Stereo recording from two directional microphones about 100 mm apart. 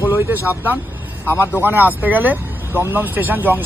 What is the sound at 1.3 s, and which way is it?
Speech, 20° left (ahead or behind).